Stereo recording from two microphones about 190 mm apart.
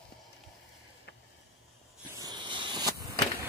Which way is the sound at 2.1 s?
20° right (ahead or behind).